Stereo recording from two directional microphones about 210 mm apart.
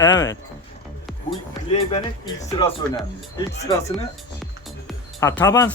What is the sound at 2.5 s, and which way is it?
Speech, 20° left (ahead or behind).